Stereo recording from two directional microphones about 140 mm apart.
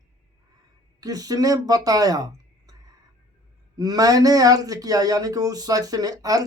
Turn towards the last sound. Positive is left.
turn(degrees=-25)  # may be behind; listen again after turning